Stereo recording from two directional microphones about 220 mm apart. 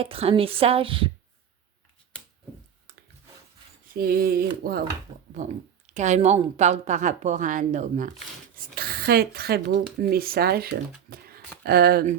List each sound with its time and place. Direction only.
0.0 s a woman's voice: 25° right (ahead or behind)
3.9 s a woman's voice: 40° right (ahead or behind)